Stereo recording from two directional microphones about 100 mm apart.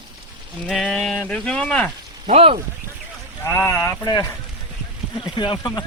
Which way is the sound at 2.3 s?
80° right.